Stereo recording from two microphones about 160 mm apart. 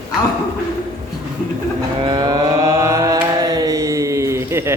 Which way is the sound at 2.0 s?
25° right (ahead or behind).